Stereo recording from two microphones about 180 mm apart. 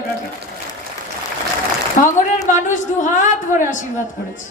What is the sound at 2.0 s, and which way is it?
A woman's voice, 40° left (ahead or behind).